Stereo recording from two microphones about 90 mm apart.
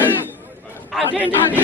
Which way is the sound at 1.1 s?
20° right (ahead or behind).